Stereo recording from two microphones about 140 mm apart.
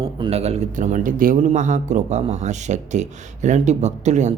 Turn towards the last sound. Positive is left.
turn(degrees=-55)  # may be behind; listen again after turning